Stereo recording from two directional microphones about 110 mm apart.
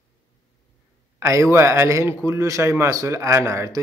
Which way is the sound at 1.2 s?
25° right (ahead or behind).